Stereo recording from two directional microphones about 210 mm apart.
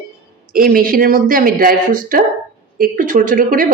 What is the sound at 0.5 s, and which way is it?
Speech, 40° right (ahead or behind).